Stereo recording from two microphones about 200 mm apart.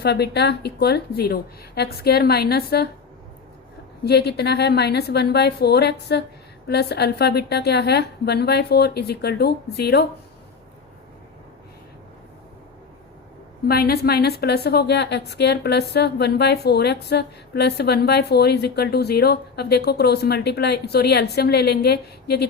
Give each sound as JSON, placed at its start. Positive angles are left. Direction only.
{"t": 0.0, "sound": "a woman's voice", "side_deg": 55}
{"t": 4.0, "sound": "a woman's voice", "side_deg": 55}
{"t": 13.7, "sound": "a woman's voice", "side_deg": 50}